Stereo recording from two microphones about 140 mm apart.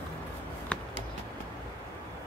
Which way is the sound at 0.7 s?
10° left (ahead or behind).